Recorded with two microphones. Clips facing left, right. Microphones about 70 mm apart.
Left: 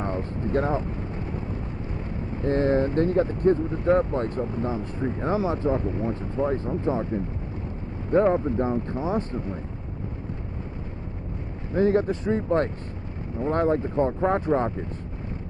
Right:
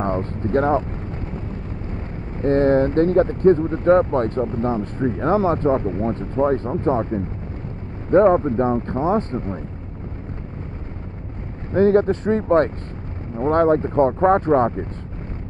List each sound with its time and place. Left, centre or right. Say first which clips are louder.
0.0 s speech: right 5 dB; right
2.4 s speech: right 6 dB; right
11.7 s speech: right 6 dB; right